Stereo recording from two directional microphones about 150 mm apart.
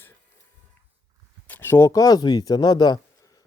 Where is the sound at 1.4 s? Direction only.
15° left (ahead or behind).